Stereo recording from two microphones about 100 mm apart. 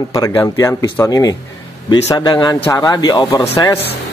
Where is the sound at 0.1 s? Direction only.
35° left (ahead or behind).